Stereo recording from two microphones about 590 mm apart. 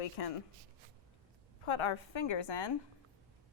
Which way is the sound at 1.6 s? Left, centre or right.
Left.